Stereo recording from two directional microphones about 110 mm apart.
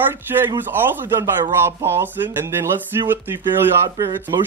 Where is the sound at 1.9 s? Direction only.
20° right (ahead or behind).